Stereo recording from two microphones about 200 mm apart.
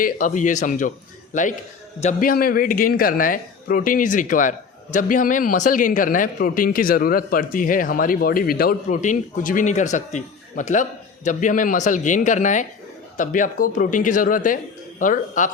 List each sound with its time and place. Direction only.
0.0 s speech: 40° left (ahead or behind)
2.3 s speech: 45° left (ahead or behind)